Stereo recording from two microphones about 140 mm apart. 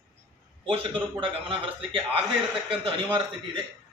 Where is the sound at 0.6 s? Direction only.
40° right (ahead or behind).